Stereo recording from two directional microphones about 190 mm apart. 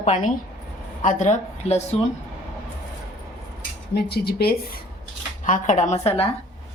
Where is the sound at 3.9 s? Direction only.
55° left (ahead or behind).